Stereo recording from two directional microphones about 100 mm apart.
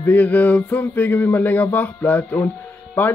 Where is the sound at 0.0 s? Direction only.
15° left (ahead or behind).